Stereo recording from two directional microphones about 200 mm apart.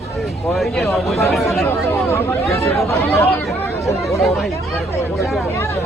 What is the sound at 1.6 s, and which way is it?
Speech, 10° left (ahead or behind).